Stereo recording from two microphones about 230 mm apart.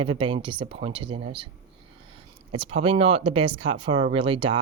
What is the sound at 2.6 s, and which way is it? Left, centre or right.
Speech, right.